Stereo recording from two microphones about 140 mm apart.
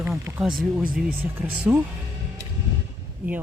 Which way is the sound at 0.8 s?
90° right.